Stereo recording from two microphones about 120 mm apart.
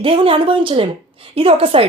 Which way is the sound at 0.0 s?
50° right (ahead or behind).